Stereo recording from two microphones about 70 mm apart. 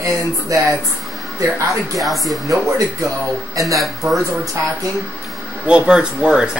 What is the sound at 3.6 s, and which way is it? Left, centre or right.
Speech, right.